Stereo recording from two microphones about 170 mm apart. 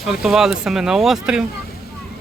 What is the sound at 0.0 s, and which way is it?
Speech, centre (ahead or behind).